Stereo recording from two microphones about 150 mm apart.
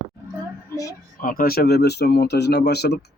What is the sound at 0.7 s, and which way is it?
Speech, 20° left (ahead or behind).